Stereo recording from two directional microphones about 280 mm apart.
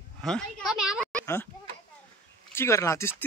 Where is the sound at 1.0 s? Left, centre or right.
Centre.